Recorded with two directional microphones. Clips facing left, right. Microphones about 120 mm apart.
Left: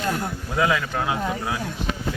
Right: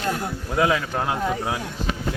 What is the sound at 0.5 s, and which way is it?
Speech, 5° right (ahead or behind).